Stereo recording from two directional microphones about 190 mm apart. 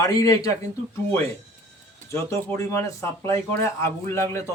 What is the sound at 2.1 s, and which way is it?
Speech, 15° left (ahead or behind).